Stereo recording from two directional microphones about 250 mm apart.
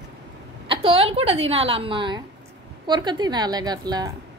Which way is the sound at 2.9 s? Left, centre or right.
Centre.